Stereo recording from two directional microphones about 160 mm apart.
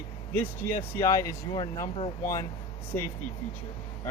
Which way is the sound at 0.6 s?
15° left (ahead or behind).